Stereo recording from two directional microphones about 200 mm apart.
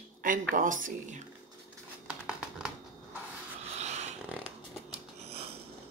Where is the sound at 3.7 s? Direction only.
35° right (ahead or behind).